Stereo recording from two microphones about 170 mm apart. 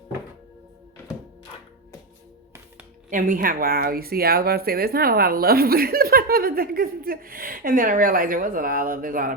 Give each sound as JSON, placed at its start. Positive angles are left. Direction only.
{"t": 3.1, "sound": "speech", "side_deg": -50}